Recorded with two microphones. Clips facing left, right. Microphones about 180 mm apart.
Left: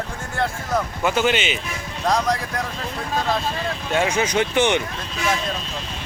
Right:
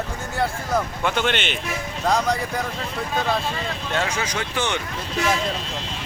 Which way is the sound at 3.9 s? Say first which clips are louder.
Left 6 dB; 20° left (ahead or behind).